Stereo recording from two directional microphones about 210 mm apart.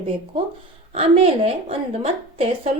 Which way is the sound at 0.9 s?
25° right (ahead or behind).